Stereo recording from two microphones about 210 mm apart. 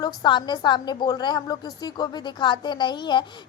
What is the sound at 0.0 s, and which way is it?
A woman's voice, 20° left (ahead or behind).